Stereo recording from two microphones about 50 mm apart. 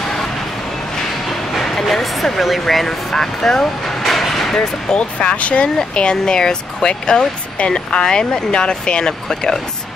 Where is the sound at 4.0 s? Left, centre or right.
Centre.